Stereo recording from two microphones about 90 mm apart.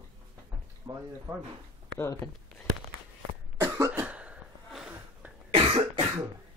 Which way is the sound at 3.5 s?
25° right (ahead or behind).